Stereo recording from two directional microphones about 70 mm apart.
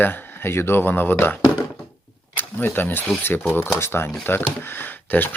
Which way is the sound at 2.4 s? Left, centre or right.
Left.